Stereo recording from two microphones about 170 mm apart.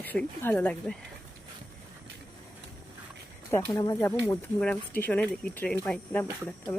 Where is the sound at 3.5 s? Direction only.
15° left (ahead or behind).